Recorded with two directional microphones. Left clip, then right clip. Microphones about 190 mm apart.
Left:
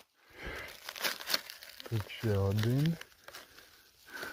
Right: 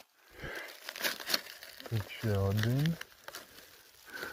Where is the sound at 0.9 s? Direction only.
Centre (ahead or behind).